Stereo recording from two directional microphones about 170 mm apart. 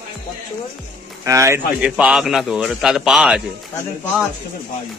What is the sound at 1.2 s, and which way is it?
Speech, 15° right (ahead or behind).